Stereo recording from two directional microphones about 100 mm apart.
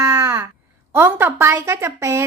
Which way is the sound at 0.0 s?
30° right (ahead or behind).